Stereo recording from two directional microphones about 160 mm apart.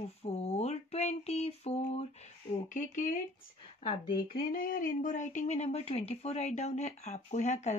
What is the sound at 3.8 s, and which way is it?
Speech, 35° left (ahead or behind).